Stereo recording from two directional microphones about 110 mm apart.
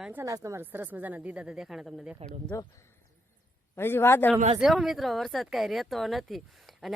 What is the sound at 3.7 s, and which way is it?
Speech, 20° left (ahead or behind).